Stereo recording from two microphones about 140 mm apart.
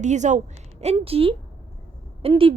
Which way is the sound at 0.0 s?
60° right (ahead or behind).